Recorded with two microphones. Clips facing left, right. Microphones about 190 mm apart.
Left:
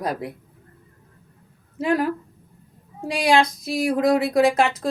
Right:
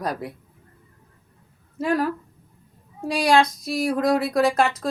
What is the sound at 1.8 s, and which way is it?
Speech, 20° left (ahead or behind).